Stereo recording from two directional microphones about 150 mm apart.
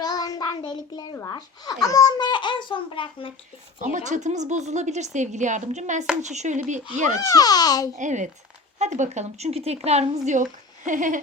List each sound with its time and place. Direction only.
0.0 s child singing: 25° left (ahead or behind)
1.3 s a child's voice: 25° left (ahead or behind)
3.9 s speech: 55° right (ahead or behind)
7.3 s a child's voice: 25° left (ahead or behind)
7.9 s speech: 55° right (ahead or behind)